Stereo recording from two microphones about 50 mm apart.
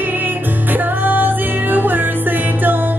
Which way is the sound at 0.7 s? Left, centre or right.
Right.